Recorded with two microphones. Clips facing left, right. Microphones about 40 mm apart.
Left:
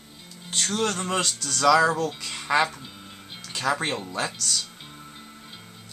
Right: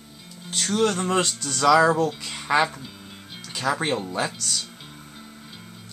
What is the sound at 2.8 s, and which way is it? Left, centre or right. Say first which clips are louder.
Music: right 2 dB; centre.